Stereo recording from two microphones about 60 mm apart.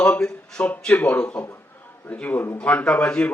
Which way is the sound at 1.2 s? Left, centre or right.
Centre.